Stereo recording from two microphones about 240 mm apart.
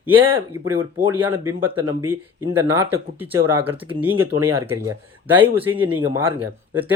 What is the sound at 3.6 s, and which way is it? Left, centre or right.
Speech, right.